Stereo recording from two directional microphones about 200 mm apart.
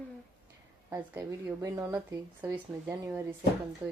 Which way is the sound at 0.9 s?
15° right (ahead or behind).